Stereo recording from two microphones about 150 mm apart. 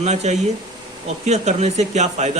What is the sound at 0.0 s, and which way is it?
Speech, 50° right (ahead or behind).